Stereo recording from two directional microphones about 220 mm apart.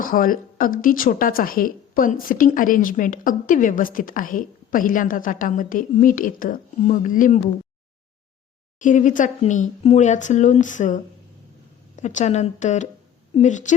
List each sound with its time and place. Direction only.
0.0 s a woman's voice: 40° left (ahead or behind)
8.8 s a woman's voice: 35° left (ahead or behind)